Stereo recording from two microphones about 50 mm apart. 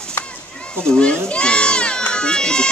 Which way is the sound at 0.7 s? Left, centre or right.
Centre.